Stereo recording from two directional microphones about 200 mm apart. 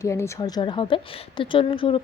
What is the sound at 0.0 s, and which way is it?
Speech, 15° left (ahead or behind).